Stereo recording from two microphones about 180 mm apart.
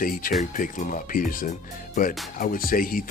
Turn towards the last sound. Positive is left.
turn(degrees=50)  # may be behind; listen again after turning